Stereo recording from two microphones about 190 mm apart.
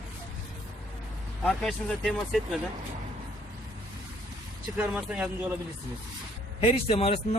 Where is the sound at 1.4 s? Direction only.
5° left (ahead or behind).